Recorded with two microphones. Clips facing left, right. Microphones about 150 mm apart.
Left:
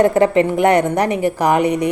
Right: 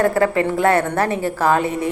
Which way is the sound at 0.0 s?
20° left (ahead or behind).